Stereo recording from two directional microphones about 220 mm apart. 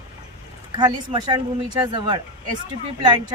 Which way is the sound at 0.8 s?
20° right (ahead or behind).